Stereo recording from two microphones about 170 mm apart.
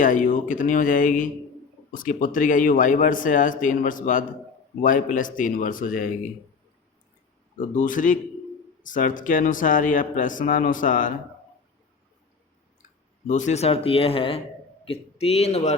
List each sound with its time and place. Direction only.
0.0 s speech: 50° left (ahead or behind)
7.6 s speech: 50° left (ahead or behind)
13.2 s a man's voice: 45° left (ahead or behind)